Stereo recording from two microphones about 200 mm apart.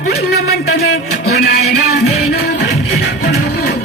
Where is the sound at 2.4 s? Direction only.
50° left (ahead or behind).